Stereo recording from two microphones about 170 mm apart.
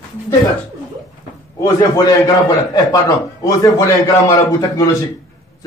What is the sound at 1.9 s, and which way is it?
A man's voice, 20° left (ahead or behind).